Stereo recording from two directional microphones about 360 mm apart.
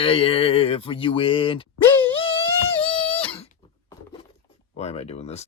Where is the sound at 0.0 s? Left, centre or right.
Centre.